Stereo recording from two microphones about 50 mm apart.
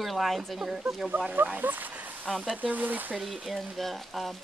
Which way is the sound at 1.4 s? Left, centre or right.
Right.